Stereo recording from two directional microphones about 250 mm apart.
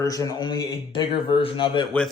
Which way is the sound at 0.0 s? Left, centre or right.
Centre.